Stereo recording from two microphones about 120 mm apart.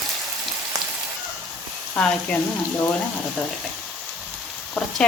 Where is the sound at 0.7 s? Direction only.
30° right (ahead or behind).